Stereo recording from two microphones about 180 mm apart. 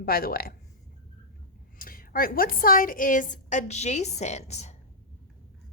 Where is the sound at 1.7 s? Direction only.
50° left (ahead or behind).